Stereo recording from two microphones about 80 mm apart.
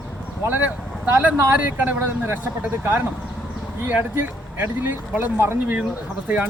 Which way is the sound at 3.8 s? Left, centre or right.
Right.